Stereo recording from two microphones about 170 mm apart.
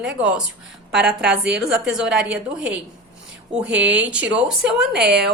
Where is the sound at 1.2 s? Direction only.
90° right.